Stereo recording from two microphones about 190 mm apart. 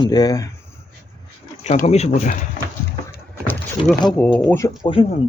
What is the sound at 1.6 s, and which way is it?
Speech, 40° left (ahead or behind).